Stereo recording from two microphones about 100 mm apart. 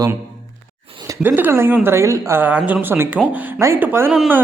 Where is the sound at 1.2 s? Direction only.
20° right (ahead or behind).